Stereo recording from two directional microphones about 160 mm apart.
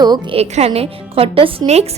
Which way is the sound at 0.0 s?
25° right (ahead or behind).